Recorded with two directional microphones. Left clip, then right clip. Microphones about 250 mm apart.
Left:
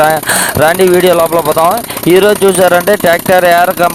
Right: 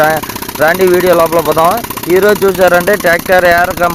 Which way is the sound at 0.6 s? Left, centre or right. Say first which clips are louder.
Even; left.